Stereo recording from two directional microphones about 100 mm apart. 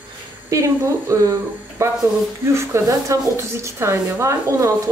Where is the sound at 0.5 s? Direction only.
35° right (ahead or behind).